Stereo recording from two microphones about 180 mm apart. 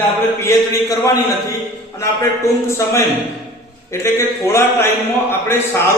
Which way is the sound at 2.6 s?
15° left (ahead or behind).